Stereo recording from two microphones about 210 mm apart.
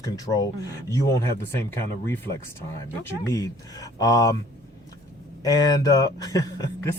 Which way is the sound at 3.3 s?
15° left (ahead or behind).